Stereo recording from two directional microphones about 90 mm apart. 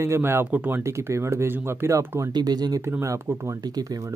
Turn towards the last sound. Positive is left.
turn(degrees=-40)  # may be behind; listen again after turning